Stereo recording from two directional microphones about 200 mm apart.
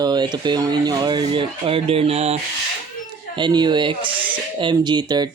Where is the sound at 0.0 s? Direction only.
20° right (ahead or behind).